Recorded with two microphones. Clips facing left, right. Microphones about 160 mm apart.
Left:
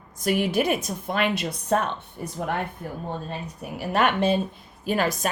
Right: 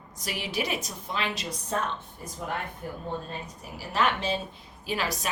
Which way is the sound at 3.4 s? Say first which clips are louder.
Left 8 dB; 60° left (ahead or behind).